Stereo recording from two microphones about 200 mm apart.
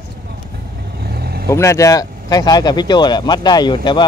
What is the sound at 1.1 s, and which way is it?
Vehicle, 50° right (ahead or behind).